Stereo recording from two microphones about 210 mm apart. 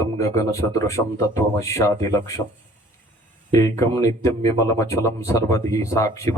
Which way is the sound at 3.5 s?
15° left (ahead or behind).